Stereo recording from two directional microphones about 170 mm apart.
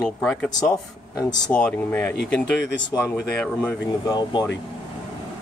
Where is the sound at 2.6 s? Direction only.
90° left.